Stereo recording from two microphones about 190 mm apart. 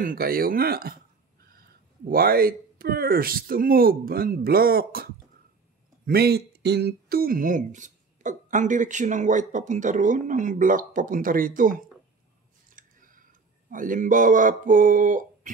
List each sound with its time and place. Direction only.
0.0 s speech: 50° right (ahead or behind)
2.0 s speech: 50° right (ahead or behind)
12.6 s a sound: 45° right (ahead or behind)
13.7 s speech: 45° right (ahead or behind)